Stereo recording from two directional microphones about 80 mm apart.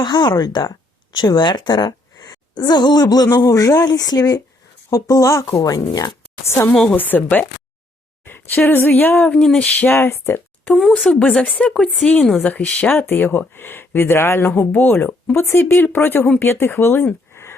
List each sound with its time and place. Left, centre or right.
0.0 s a woman's voice: left
6.5 s a woman's voice: left; by 9.9 s centre
9.9 s speech: left
10.8 s speech: centre
11.2 s a woman's voice: centre